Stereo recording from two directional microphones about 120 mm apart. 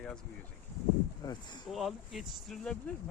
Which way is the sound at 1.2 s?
35° left (ahead or behind).